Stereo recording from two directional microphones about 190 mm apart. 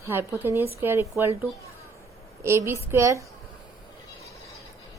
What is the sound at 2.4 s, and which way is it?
Speech, 15° right (ahead or behind).